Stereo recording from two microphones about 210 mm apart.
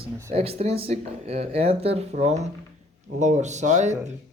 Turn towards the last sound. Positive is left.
turn(degrees=-35)  # may be behind; listen again after turning